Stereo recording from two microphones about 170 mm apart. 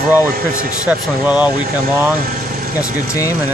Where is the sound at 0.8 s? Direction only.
10° right (ahead or behind).